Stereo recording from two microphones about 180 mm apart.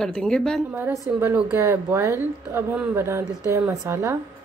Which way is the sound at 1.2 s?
10° right (ahead or behind).